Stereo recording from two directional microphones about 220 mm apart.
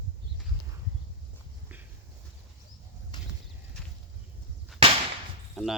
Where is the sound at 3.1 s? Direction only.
20° left (ahead or behind).